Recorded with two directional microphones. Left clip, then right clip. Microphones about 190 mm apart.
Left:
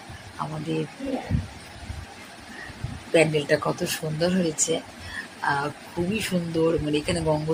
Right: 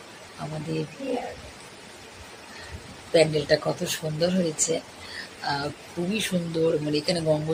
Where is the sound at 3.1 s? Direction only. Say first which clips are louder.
Even; 10° left (ahead or behind).